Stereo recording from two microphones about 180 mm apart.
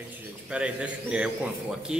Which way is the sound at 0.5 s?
5° right (ahead or behind).